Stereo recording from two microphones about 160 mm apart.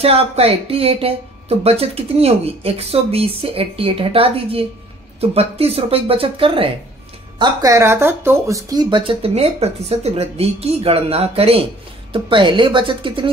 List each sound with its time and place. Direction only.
0.0 s speech: 40° right (ahead or behind)
7.3 s speech: 25° right (ahead or behind)